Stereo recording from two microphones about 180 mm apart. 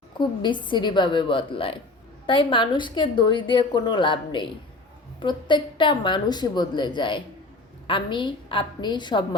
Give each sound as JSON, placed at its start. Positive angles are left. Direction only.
{"t": 0.2, "sound": "a woman's voice", "side_deg": 25}